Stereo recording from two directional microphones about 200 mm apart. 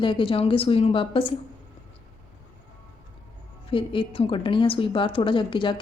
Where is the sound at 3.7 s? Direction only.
25° left (ahead or behind).